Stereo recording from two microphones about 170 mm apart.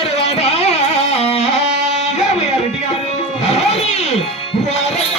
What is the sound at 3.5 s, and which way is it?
Music, 40° left (ahead or behind).